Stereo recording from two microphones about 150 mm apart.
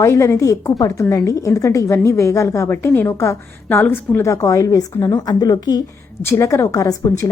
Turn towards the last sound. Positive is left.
turn(degrees=25)  # may be behind; listen again after turning